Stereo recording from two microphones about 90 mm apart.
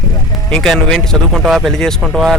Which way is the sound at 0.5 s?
5° left (ahead or behind).